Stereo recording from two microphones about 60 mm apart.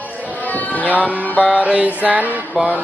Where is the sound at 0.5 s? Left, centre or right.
Left.